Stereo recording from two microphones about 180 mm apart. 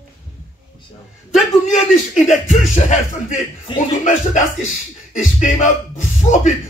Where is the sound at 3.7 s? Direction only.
45° left (ahead or behind).